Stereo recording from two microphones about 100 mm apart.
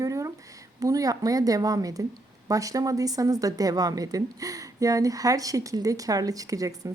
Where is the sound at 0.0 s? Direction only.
35° right (ahead or behind).